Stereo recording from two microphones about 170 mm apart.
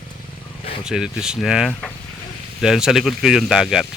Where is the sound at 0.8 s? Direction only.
5° right (ahead or behind).